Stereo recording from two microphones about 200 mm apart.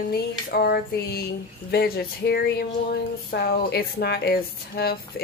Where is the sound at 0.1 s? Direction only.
50° left (ahead or behind).